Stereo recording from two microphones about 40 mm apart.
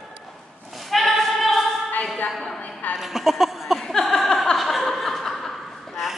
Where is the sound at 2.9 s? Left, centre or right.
Centre.